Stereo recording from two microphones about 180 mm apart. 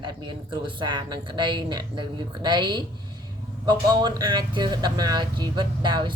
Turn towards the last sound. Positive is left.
turn(degrees=-25)  # may be behind; listen again after turning